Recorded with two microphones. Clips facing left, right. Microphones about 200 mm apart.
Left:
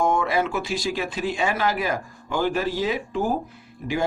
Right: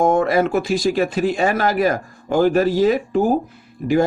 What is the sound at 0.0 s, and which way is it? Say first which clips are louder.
Speech: right 6 dB; 45° right (ahead or behind).